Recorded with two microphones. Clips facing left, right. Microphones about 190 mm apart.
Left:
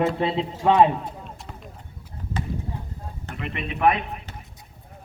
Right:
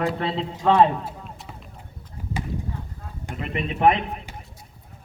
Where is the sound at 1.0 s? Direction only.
5° right (ahead or behind).